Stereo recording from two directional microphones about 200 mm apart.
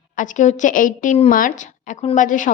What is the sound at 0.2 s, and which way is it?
A woman's voice, 40° left (ahead or behind).